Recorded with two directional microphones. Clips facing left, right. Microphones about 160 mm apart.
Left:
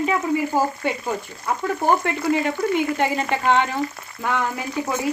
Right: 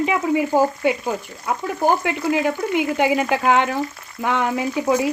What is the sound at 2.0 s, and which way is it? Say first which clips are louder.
Speech: right 1 dB; 5° right (ahead or behind).